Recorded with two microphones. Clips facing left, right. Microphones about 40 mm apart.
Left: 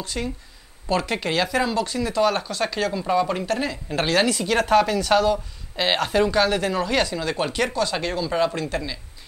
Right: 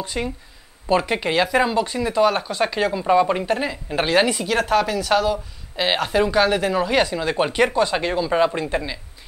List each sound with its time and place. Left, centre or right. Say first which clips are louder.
0.0 s speech: right 3 dB; centre
4.5 s speech: left 1 dB; centre